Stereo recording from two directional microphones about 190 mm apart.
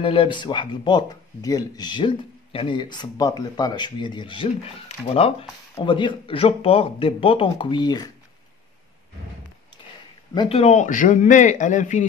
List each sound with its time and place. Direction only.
0.0 s speech: 25° left (ahead or behind)
10.3 s a man's voice: 25° left (ahead or behind)